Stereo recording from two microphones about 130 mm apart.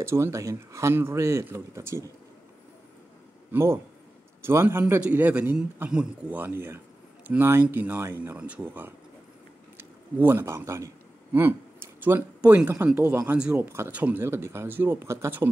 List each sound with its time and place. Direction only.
0.0 s speech: 20° right (ahead or behind)
3.5 s a man's voice: 20° right (ahead or behind)
10.1 s a man's voice: 15° right (ahead or behind)